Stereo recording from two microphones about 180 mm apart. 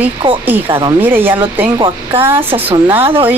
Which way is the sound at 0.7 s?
30° right (ahead or behind).